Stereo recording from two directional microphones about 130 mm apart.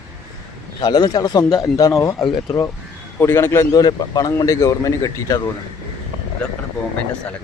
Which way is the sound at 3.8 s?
30° left (ahead or behind).